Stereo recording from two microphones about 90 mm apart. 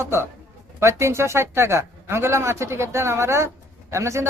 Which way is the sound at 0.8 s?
30° right (ahead or behind).